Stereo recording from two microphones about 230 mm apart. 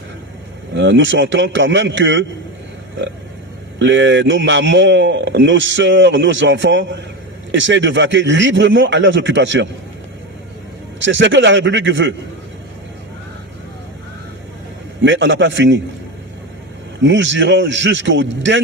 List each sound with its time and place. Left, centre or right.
0.8 s a man's voice: right
3.8 s a man's voice: right
11.0 s a man's voice: right
15.0 s a man's voice: right
17.0 s a man's voice: right